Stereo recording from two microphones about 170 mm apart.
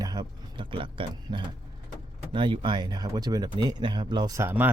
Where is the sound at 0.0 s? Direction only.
25° right (ahead or behind).